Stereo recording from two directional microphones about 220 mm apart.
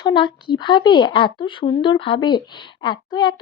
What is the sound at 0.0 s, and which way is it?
Speech, 20° left (ahead or behind).